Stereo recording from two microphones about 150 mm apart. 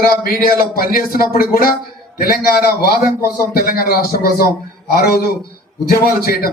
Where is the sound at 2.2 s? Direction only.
90° left.